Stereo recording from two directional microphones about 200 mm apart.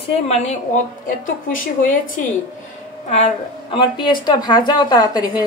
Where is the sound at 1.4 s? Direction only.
45° left (ahead or behind).